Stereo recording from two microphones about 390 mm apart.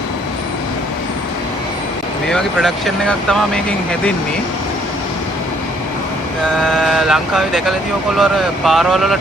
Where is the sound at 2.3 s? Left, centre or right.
Centre.